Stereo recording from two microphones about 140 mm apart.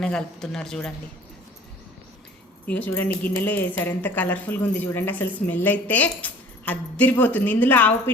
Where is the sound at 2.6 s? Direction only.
10° left (ahead or behind).